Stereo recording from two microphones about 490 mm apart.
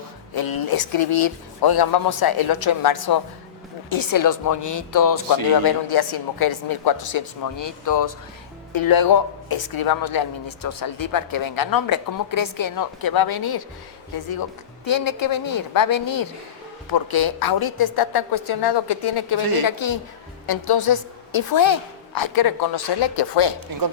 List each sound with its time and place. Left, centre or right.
0.3 s a woman's voice: left
5.6 s a woman's voice: left
14.8 s a woman's voice: left